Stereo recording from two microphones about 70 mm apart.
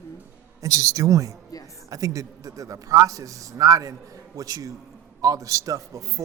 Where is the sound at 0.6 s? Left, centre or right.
Right.